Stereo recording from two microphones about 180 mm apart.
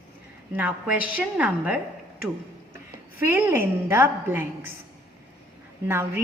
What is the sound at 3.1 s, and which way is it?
A woman's voice, 10° right (ahead or behind).